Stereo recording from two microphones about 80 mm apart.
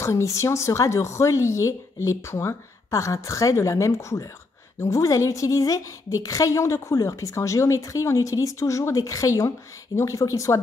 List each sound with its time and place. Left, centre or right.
0.0 s a woman's voice: left